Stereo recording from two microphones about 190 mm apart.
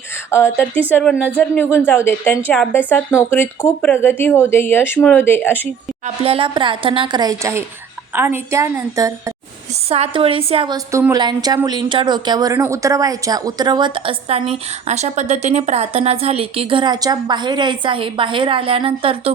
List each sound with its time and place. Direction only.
0.3 s speech: 15° left (ahead or behind)
6.2 s a woman's voice: 30° right (ahead or behind)
9.9 s speech: 30° right (ahead or behind)
10.9 s speech: 15° right (ahead or behind)